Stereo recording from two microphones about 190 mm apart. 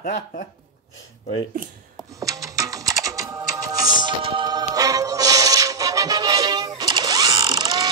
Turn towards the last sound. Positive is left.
turn(degrees=-20)  # may be behind; listen again after turning